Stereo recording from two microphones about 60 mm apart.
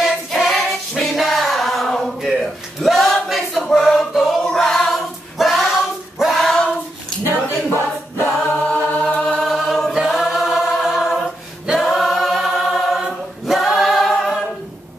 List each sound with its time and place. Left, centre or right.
0.0 s choir: centre
2.8 s a sound: centre
6.1 s singing: centre
7.2 s a capella: left
9.4 s choir: centre
11.8 s chant: centre
13.5 s a capella: centre